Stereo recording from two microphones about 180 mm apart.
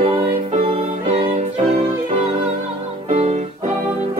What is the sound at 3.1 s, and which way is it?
Music, 35° right (ahead or behind).